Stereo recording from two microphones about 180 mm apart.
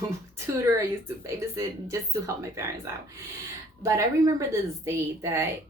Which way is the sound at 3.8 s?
15° right (ahead or behind).